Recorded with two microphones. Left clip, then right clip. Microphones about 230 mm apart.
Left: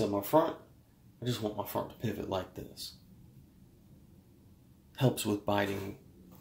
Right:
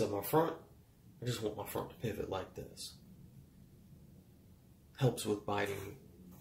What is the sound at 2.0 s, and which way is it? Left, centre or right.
Speech, left.